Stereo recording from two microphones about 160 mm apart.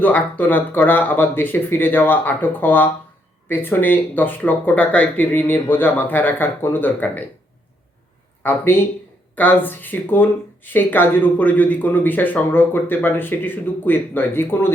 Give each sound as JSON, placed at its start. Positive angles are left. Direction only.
{"t": 0.0, "sound": "speech", "side_deg": 10}
{"t": 8.4, "sound": "speech", "side_deg": 15}